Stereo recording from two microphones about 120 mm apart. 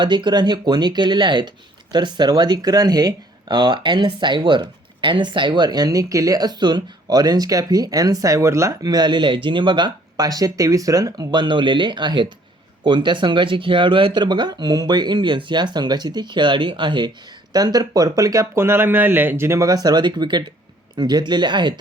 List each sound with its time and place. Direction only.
0.0 s speech: 40° right (ahead or behind)